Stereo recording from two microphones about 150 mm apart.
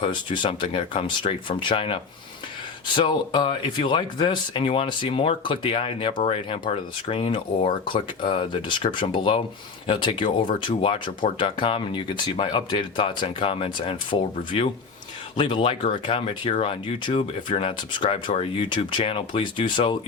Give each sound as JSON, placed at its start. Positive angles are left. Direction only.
{"t": 0.0, "sound": "speech", "side_deg": 35}